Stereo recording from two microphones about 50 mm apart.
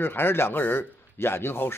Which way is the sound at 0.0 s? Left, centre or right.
Left.